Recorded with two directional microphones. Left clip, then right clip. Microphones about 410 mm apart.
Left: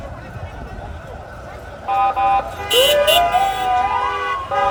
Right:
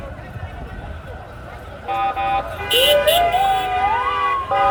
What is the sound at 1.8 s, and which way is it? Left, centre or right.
Music, centre.